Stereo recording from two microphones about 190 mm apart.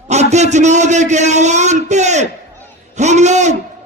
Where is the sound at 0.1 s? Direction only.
35° right (ahead or behind).